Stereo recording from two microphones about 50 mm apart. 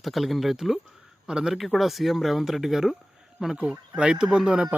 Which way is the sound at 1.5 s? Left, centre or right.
Centre.